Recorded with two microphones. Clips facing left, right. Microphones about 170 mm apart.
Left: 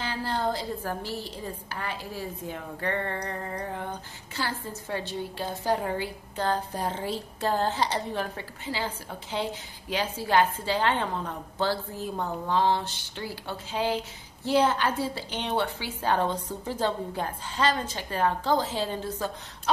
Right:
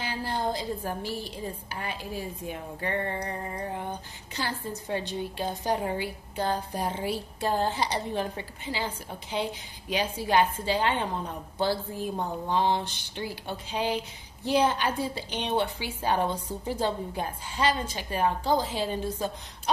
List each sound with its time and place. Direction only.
0.0 s a woman's voice: 10° right (ahead or behind)